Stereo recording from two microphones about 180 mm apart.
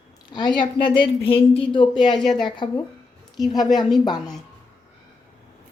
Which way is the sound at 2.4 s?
25° left (ahead or behind).